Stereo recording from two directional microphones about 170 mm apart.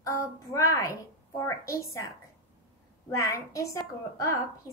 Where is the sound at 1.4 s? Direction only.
15° left (ahead or behind).